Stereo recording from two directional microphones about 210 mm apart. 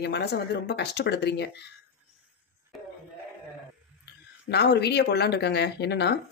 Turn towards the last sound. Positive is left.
turn(degrees=55)  # may be behind; listen again after turning